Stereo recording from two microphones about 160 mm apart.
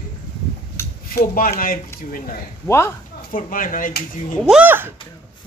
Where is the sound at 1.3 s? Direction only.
65° left (ahead or behind).